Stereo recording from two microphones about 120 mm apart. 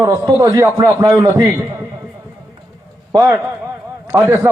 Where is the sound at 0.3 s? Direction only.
25° right (ahead or behind).